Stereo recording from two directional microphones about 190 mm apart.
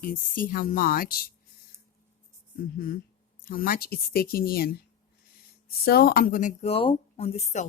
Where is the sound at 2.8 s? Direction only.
50° left (ahead or behind).